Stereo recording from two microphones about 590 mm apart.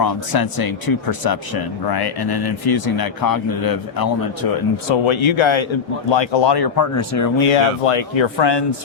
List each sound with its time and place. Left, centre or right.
0.0 s speech: left
5.0 s speech: left
6.9 s speech: left
7.3 s speech: left